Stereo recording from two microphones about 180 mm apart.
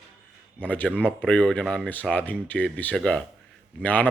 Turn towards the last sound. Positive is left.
turn(degrees=10)  # may be behind; listen again after turning